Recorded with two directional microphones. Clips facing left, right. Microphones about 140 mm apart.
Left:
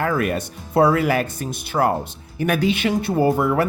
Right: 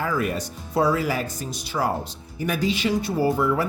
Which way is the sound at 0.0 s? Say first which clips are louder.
Left 4 dB; 65° left (ahead or behind).